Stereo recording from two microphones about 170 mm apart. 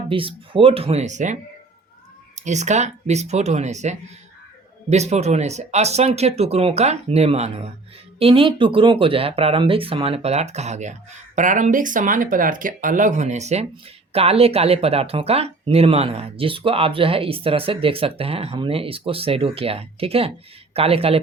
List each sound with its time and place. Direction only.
0.1 s speech: 30° right (ahead or behind)